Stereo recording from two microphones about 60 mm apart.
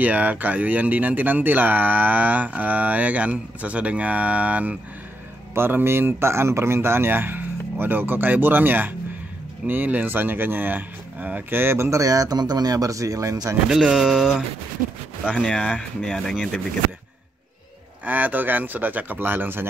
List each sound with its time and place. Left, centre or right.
0.0 s speech: right
5.5 s a man's voice: right
12.0 s speech: right
13.7 s speech: centre
15.3 s speech: centre
18.0 s a man's voice: right